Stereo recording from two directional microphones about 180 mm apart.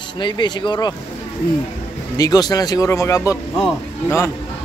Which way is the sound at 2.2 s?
20° left (ahead or behind).